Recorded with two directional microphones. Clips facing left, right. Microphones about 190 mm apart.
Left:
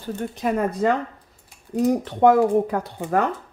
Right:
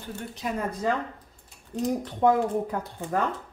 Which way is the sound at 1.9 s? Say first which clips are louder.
Left 6 dB; 75° left (ahead or behind).